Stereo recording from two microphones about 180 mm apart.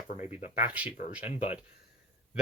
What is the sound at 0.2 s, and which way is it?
Speech, 40° left (ahead or behind).